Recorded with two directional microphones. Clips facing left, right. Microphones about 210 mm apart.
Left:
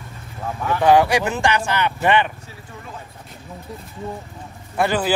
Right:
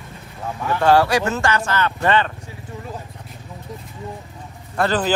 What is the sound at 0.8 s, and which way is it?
Speech, 15° left (ahead or behind).